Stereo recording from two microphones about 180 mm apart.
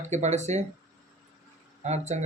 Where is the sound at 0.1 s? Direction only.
40° right (ahead or behind).